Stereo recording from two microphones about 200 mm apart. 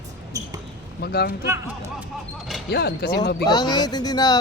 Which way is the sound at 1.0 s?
50° left (ahead or behind).